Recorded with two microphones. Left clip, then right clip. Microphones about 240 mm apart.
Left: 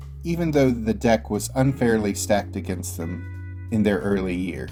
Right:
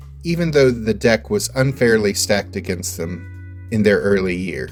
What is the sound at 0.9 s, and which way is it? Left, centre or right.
Speech, right.